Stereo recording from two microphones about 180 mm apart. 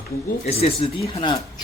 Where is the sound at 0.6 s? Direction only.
30° left (ahead or behind).